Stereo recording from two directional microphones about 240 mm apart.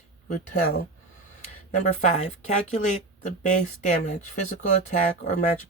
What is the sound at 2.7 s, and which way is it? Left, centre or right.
Speech, left.